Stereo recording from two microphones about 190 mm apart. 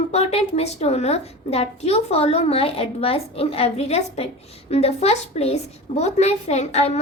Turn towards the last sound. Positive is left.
turn(degrees=35)  # may be behind; listen again after turning